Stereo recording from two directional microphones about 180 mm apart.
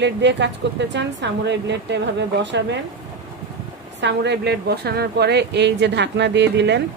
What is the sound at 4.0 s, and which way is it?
A woman's voice, 75° right (ahead or behind).